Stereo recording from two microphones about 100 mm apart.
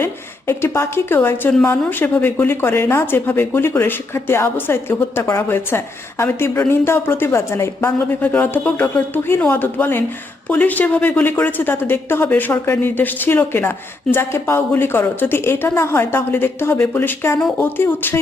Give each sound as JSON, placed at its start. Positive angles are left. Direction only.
{"t": 0.0, "sound": "speech", "side_deg": 25}